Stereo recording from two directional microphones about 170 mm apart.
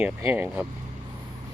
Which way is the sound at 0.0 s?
10° right (ahead or behind).